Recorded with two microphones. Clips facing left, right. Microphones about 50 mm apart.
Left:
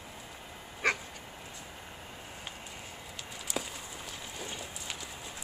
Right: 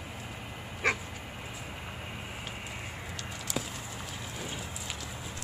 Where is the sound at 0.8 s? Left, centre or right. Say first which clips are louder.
Right 1 dB; centre.